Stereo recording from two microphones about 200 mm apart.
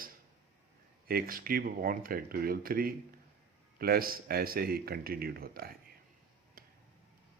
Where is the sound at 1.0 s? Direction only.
45° right (ahead or behind).